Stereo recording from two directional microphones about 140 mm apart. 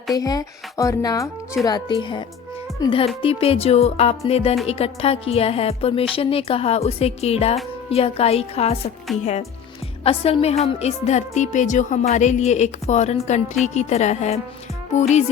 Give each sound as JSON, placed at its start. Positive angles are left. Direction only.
{"t": 0.2, "sound": "a woman's voice", "side_deg": 25}
{"t": 10.0, "sound": "a woman's voice", "side_deg": 45}